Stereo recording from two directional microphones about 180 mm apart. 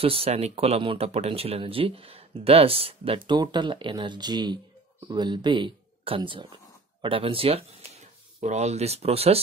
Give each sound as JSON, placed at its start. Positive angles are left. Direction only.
{"t": 0.0, "sound": "speech", "side_deg": -30}